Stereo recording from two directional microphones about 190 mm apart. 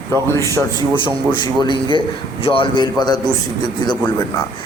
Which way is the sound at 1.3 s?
25° left (ahead or behind).